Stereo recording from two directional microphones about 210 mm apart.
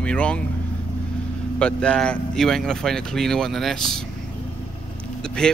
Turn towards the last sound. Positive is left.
turn(degrees=5)  # may be behind; listen again after turning